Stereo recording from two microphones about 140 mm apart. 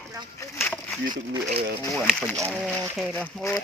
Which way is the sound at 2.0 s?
5° right (ahead or behind).